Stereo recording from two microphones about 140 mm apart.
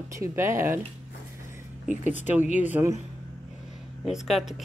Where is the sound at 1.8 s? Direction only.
60° left (ahead or behind).